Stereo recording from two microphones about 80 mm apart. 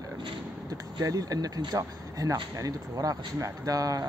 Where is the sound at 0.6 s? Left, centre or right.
Right.